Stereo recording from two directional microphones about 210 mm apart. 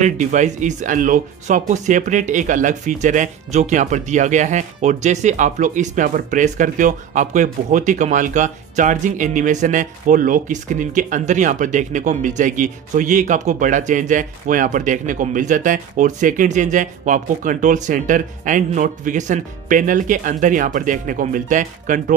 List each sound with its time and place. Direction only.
0.0 s speech: 35° right (ahead or behind)